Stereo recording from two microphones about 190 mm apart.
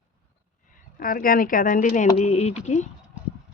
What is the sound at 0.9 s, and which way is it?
A woman's voice, 50° left (ahead or behind).